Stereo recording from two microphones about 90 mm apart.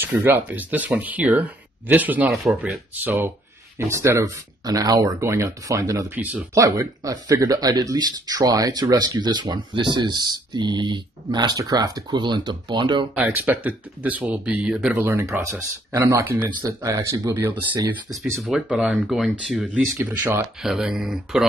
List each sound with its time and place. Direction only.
0.0 s speech: 20° right (ahead or behind)
2.2 s speech: centre (ahead or behind)
3.0 s speech: 20° right (ahead or behind)
4.6 s speech: 45° right (ahead or behind)
6.0 s speech: 20° right (ahead or behind)
6.5 s speech: 40° right (ahead or behind); by 13.1 s 60° right (ahead or behind)
13.1 s speech: 20° right (ahead or behind)
15.0 s speech: 30° right (ahead or behind)
16.6 s speech: 40° right (ahead or behind)
17.3 s speech: 25° right (ahead or behind)
18.1 s speech: centre (ahead or behind)
20.0 s speech: 25° right (ahead or behind)
20.6 s speech: 5° right (ahead or behind)